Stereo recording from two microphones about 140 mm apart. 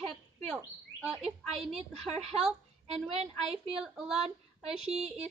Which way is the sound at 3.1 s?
45° right (ahead or behind).